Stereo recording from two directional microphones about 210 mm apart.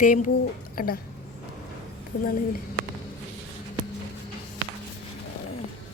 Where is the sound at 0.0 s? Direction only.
40° left (ahead or behind).